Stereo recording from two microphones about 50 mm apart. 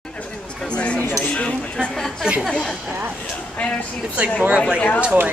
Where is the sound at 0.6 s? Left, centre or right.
Left.